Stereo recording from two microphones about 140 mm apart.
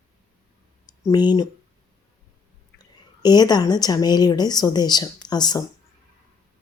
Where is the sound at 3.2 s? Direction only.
30° left (ahead or behind).